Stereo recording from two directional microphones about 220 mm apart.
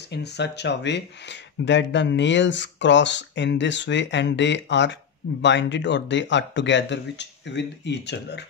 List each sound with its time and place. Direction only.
0.1 s speech: 50° left (ahead or behind)